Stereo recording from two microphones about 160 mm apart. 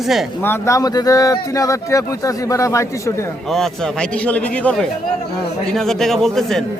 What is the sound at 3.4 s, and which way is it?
A man's voice, centre (ahead or behind).